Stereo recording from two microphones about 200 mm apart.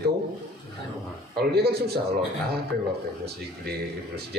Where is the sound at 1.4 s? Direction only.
55° right (ahead or behind).